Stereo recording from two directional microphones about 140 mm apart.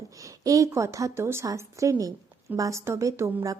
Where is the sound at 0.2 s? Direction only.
25° right (ahead or behind).